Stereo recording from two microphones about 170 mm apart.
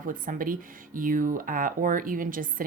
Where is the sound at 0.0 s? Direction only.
55° right (ahead or behind).